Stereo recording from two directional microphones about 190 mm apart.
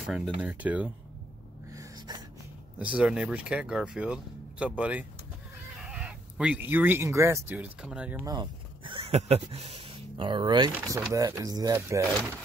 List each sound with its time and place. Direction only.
0.0 s speech: 5° right (ahead or behind)
1.7 s gasp: 20° right (ahead or behind)
3.0 s speech: 5° right (ahead or behind)
8.3 s speech: 25° right (ahead or behind)